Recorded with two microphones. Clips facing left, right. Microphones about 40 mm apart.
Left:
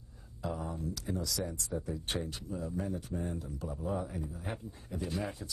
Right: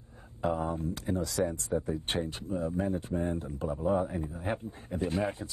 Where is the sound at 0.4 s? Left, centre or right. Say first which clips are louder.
Right 7 dB; right.